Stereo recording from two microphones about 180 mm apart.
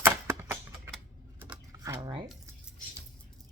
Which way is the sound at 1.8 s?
20° right (ahead or behind).